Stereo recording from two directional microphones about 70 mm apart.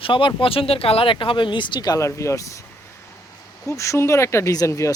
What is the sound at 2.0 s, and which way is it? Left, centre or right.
Speech, left.